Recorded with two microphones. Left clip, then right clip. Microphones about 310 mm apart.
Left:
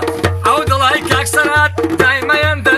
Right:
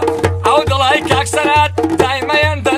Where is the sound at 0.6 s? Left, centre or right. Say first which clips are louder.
Left 1 dB; centre.